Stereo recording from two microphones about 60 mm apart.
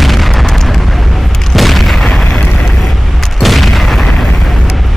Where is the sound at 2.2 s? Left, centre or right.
Centre.